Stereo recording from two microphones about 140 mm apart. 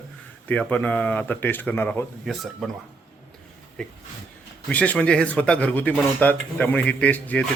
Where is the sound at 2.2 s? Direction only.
Centre (ahead or behind).